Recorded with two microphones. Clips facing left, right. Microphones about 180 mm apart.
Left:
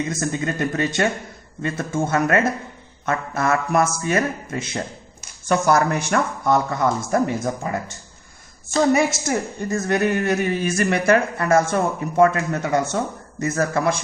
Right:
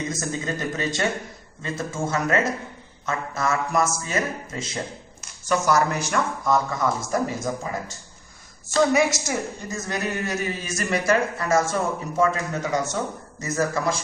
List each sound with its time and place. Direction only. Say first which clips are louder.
0.1 s speech: left 4 dB; 55° left (ahead or behind)
8.9 s speech: left 3 dB; 55° left (ahead or behind)